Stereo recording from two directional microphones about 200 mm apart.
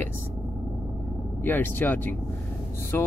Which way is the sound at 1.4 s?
10° left (ahead or behind).